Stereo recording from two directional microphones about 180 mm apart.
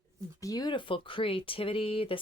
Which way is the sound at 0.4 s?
20° left (ahead or behind).